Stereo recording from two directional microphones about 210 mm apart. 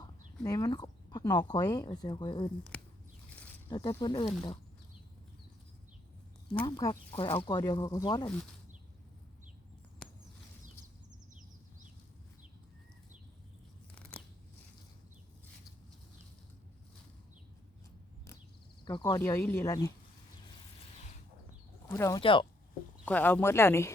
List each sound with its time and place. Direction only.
0.0 s a sound: 15° left (ahead or behind)
1.5 s speech: 15° left (ahead or behind)
3.7 s speech: 20° left (ahead or behind)
6.5 s speech: 25° left (ahead or behind)
13.9 s scissors: 10° left (ahead or behind)
18.9 s speech: 20° left (ahead or behind)
21.8 s speech: 15° left (ahead or behind)
22.2 s speech: 25° left (ahead or behind)
23.0 s speech: 10° left (ahead or behind)